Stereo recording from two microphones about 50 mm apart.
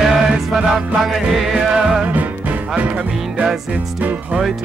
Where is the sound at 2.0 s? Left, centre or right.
Right.